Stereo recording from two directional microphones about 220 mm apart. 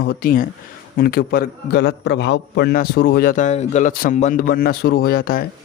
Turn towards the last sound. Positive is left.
turn(degrees=40)  # may be behind; listen again after turning